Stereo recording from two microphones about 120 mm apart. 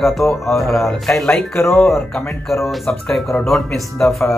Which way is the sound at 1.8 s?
5° left (ahead or behind).